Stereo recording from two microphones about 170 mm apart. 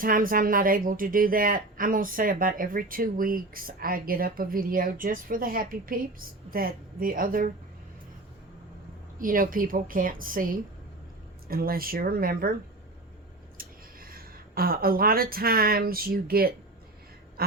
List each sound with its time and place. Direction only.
0.0 s a woman's voice: 55° right (ahead or behind)
9.1 s a woman's voice: 55° right (ahead or behind)
13.6 s speech: 60° right (ahead or behind)